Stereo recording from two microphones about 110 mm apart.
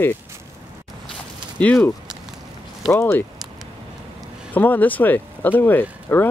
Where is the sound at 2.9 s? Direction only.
25° left (ahead or behind).